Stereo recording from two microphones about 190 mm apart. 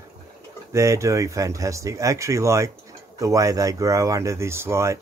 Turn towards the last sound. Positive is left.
turn(degrees=-15)  # may be behind; listen again after turning